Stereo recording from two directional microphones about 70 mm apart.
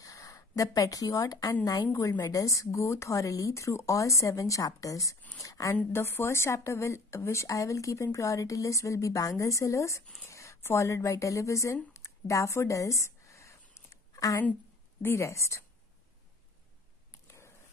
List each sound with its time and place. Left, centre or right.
0.0 s speech: left
1.9 s a woman's voice: left
2.1 s a woman's voice: left
5.9 s a woman's voice: left
10.2 s a sound: left
10.6 s speech: left
15.0 s a woman's voice: left
17.3 s dog: left